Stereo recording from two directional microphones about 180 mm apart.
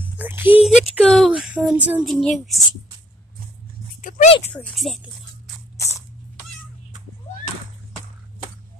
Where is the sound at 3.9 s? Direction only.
45° left (ahead or behind).